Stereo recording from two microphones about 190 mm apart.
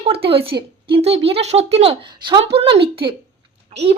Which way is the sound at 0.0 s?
30° right (ahead or behind).